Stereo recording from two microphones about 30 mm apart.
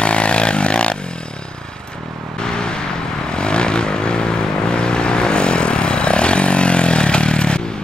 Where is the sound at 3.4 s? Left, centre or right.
Left.